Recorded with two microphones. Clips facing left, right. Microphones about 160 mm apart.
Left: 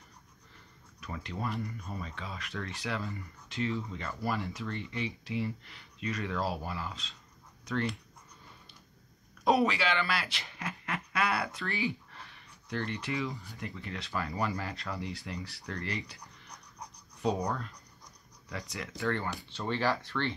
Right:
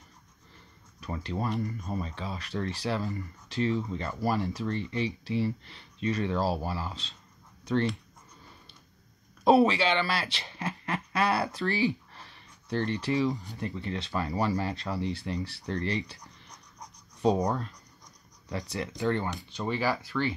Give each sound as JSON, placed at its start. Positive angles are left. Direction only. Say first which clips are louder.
{"t": 1.0, "sound": "speech", "louder": "right 5 dB", "side_deg": -30}
{"t": 9.4, "sound": "speech", "louder": "right 5 dB", "side_deg": -30}
{"t": 17.2, "sound": "speech", "louder": "right 6 dB", "side_deg": -40}
{"t": 18.5, "sound": "speech", "louder": "right 6 dB", "side_deg": -30}